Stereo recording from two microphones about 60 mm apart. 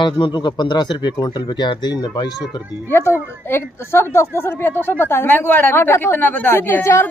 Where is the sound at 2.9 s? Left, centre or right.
Left.